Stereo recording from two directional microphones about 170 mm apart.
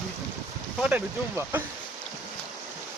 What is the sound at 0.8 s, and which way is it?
Speech, 5° right (ahead or behind).